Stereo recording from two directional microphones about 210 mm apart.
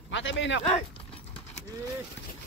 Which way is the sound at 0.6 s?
30° left (ahead or behind).